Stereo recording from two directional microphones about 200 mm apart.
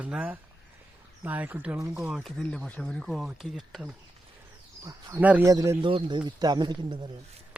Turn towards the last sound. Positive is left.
turn(degrees=-25)  # may be behind; listen again after turning